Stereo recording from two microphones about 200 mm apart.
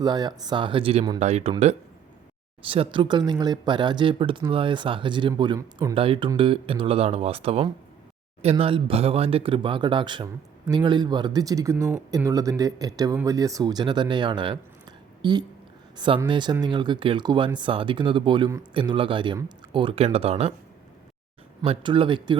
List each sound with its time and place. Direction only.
0.0 s speech: 20° right (ahead or behind)
21.6 s speech: 25° right (ahead or behind)